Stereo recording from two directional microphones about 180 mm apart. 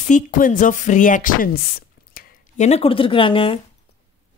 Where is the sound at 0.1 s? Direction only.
45° left (ahead or behind).